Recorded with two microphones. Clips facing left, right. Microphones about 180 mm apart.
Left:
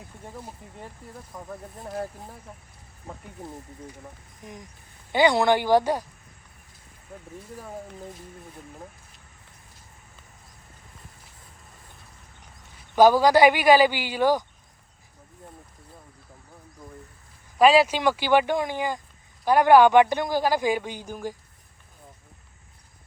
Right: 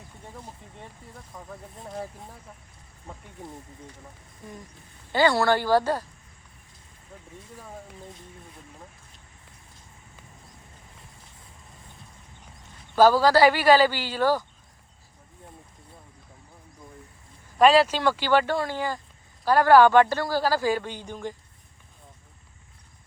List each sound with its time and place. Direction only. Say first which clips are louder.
0.3 s speech: left 3 dB; 5° left (ahead or behind)
3.4 s speech: left 1 dB; centre (ahead or behind)
5.1 s a man's voice: left 2 dB; 15° left (ahead or behind)
13.0 s a man's voice: left 1 dB; 15° left (ahead or behind)
17.6 s a man's voice: left 1 dB; 10° left (ahead or behind)